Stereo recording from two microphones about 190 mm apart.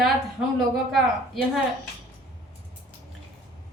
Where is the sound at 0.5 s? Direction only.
Centre (ahead or behind).